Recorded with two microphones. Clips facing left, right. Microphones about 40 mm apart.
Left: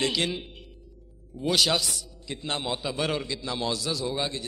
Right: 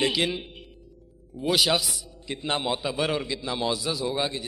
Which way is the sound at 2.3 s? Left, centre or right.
Right.